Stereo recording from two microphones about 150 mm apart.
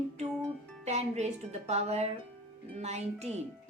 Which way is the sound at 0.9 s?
45° right (ahead or behind).